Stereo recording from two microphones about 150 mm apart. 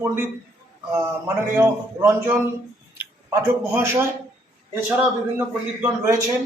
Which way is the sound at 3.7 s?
15° right (ahead or behind).